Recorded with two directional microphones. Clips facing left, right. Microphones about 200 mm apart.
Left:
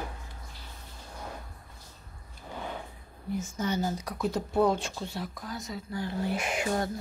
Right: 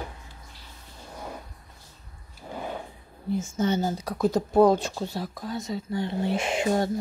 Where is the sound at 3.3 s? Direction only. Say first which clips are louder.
Right 5 dB; 25° right (ahead or behind).